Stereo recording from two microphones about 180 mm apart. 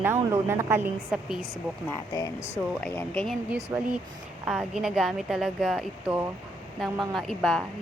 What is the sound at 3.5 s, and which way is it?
A woman's voice, 5° right (ahead or behind).